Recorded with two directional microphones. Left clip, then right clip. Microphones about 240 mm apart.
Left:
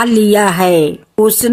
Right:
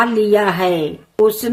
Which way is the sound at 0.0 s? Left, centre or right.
Left.